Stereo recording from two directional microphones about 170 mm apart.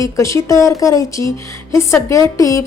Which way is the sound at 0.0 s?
15° left (ahead or behind).